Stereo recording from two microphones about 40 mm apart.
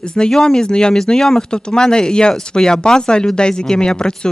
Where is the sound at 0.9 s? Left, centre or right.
Centre.